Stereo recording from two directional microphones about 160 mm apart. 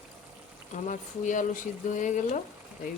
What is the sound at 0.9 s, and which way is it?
Speech, 50° left (ahead or behind).